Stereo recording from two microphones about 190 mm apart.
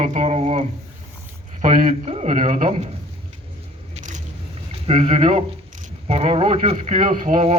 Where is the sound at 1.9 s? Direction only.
30° right (ahead or behind).